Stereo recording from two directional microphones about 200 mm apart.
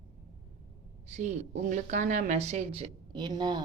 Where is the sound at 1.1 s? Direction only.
35° right (ahead or behind).